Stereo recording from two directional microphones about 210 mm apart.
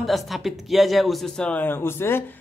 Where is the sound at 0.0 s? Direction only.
Centre (ahead or behind).